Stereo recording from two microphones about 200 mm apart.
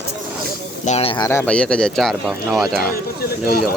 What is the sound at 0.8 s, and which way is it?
Speech, 30° left (ahead or behind).